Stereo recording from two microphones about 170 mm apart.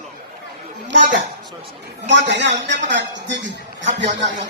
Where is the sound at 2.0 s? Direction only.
90° right.